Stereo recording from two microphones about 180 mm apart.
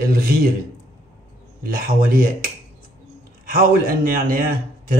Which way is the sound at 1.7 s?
55° right (ahead or behind).